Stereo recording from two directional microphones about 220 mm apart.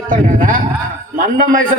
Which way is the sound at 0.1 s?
40° right (ahead or behind).